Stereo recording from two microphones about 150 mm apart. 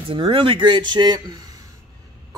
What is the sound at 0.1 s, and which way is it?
A man's voice, 35° right (ahead or behind).